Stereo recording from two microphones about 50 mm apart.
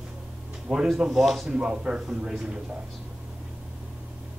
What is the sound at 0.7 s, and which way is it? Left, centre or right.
Speech, right.